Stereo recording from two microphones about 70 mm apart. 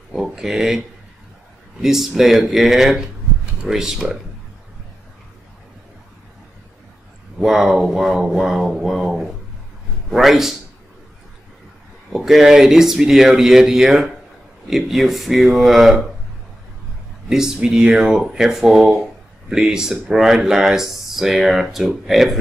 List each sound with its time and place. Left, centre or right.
0.1 s speech: centre
7.3 s a man's voice: centre
12.1 s speech: centre
17.3 s speech: centre